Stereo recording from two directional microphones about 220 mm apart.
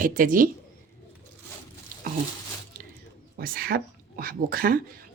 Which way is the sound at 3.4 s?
40° right (ahead or behind).